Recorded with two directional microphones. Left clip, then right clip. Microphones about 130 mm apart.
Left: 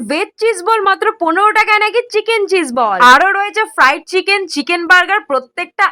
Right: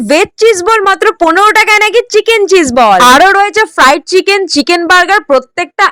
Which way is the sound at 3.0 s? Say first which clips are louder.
Even; 50° right (ahead or behind).